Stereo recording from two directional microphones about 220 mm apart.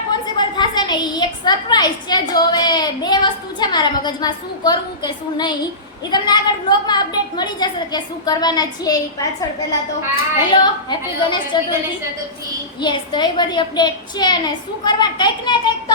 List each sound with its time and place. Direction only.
0.1 s a woman's voice: 20° left (ahead or behind)
10.6 s a woman's voice: 20° left (ahead or behind)
12.8 s a woman's voice: 20° left (ahead or behind)